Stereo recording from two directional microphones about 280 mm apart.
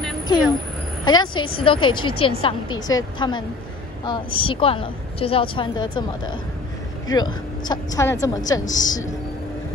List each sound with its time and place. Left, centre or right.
1.0 s a woman's voice: centre